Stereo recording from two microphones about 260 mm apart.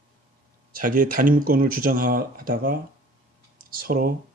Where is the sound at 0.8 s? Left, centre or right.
Right.